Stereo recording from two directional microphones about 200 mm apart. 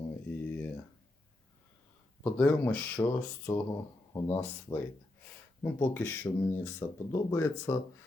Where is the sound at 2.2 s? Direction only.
5° left (ahead or behind).